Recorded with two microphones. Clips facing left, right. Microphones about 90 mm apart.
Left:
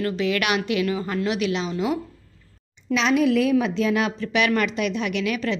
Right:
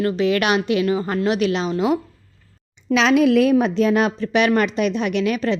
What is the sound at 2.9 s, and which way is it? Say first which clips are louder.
Speech: right 4 dB; 80° right.